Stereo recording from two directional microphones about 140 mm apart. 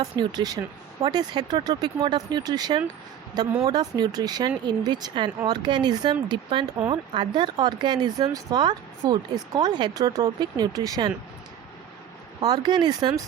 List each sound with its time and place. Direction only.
0.0 s speech: 30° right (ahead or behind)
12.4 s speech: 30° right (ahead or behind)